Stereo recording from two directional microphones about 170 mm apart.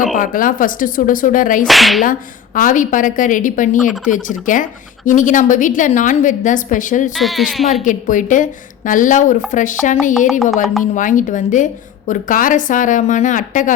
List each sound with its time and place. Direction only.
0.1 s a woman's voice: 50° left (ahead or behind)
1.6 s speech: centre (ahead or behind)
2.6 s a woman's voice: 50° left (ahead or behind)
7.2 s speech: centre (ahead or behind)
7.7 s a woman's voice: 50° left (ahead or behind)